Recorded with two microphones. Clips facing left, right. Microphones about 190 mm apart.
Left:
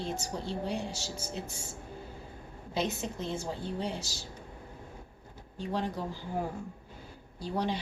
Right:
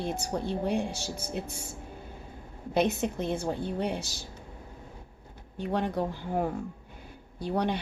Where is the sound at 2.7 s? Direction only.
60° right (ahead or behind).